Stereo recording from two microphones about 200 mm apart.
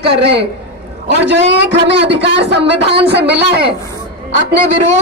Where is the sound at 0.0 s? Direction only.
55° right (ahead or behind).